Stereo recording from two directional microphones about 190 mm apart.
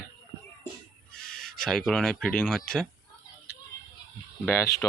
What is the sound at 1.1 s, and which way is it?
Owl, 50° left (ahead or behind).